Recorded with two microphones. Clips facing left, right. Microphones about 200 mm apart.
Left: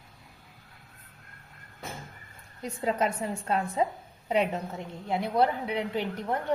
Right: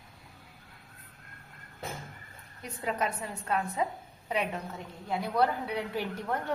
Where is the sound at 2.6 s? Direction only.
30° left (ahead or behind).